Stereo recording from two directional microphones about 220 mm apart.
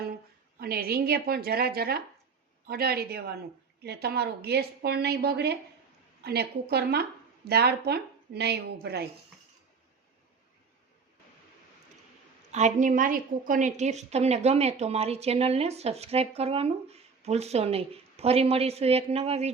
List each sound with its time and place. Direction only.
0.6 s a woman's voice: 45° right (ahead or behind)
12.5 s a woman's voice: 30° right (ahead or behind)